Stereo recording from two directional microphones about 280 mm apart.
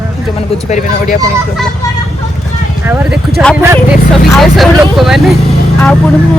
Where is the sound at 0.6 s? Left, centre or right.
Left.